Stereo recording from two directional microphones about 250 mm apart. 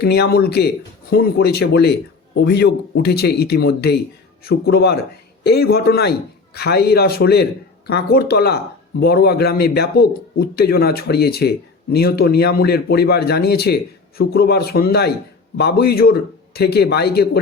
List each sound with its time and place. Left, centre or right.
0.0 s a man's voice: left